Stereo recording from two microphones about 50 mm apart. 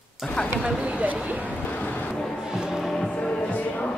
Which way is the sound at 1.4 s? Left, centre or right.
Left.